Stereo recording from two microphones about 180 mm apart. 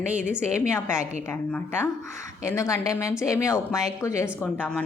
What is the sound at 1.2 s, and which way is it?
Speech, 10° left (ahead or behind).